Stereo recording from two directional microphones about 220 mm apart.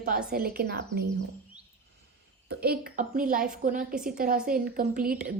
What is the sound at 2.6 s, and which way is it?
A woman's voice, 45° right (ahead or behind).